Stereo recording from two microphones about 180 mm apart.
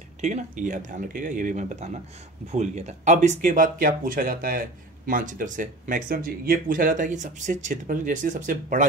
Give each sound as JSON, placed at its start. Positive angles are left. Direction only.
{"t": 0.2, "sound": "speech", "side_deg": -40}